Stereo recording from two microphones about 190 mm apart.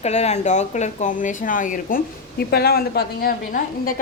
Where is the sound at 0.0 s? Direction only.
35° left (ahead or behind).